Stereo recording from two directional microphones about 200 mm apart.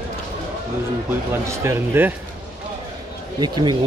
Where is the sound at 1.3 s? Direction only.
10° right (ahead or behind).